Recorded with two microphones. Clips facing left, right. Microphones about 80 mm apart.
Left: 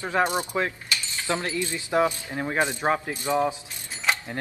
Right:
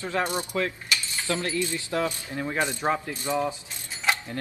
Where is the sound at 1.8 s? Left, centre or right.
Left.